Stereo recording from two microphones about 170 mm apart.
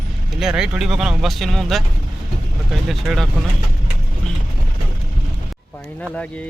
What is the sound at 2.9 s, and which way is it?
Speech, centre (ahead or behind).